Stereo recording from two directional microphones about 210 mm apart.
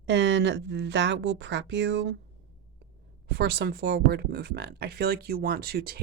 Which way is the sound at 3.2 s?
50° right (ahead or behind).